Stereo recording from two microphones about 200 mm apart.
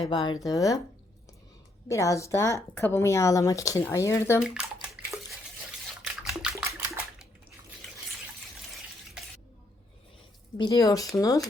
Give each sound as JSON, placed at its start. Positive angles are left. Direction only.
{"t": 0.0, "sound": "speech", "side_deg": 20}
{"t": 1.9, "sound": "a woman's voice", "side_deg": 15}
{"t": 4.4, "sound": "speech", "side_deg": -5}
{"t": 5.0, "sound": "dishes", "side_deg": -5}
{"t": 6.0, "sound": "a sound", "side_deg": 0}
{"t": 10.6, "sound": "a woman's voice", "side_deg": 20}